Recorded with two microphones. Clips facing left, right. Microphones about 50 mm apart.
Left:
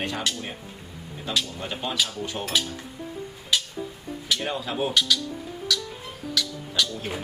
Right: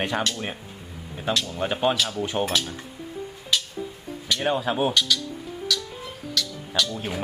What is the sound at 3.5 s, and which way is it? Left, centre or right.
Music, centre.